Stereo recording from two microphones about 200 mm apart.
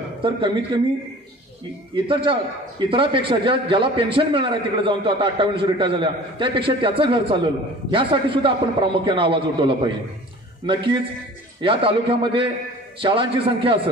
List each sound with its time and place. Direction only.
0.2 s a man's voice: 25° right (ahead or behind)
2.0 s a man's voice: 25° right (ahead or behind)